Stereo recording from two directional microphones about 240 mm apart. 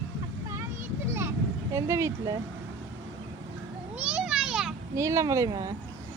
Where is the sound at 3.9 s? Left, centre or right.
Centre.